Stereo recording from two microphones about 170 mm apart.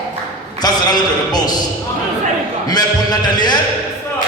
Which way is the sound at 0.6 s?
25° left (ahead or behind).